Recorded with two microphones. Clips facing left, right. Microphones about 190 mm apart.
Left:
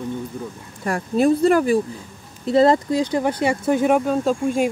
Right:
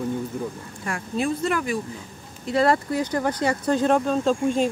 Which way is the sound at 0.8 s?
40° left (ahead or behind).